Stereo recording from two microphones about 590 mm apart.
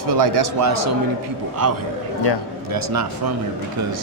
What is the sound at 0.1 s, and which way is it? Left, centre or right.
Speech, right.